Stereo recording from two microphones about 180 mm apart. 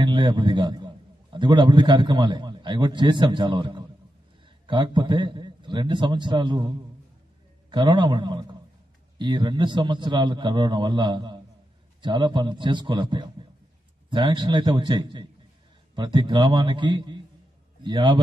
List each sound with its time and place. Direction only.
0.0 s a man's voice: 25° right (ahead or behind)
7.7 s a man's voice: 25° right (ahead or behind)